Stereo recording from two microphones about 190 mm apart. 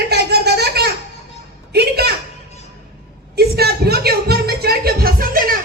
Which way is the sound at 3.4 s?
55° right (ahead or behind).